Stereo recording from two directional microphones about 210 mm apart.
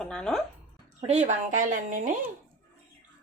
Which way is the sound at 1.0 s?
35° right (ahead or behind).